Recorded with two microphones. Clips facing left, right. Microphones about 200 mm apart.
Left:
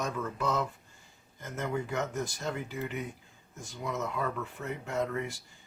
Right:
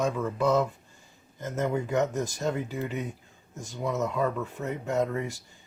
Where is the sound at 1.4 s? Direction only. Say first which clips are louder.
Right 5 dB; 40° right (ahead or behind).